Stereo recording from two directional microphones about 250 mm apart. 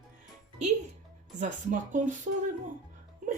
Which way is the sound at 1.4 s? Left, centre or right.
Right.